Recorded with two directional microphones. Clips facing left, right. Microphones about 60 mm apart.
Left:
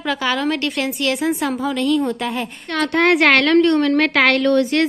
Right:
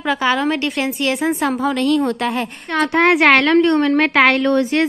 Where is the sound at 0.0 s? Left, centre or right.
Right.